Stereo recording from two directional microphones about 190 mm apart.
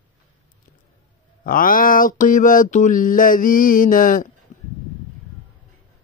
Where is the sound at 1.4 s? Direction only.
45° left (ahead or behind).